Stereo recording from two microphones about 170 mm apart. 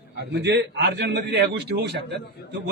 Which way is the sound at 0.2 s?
90° right.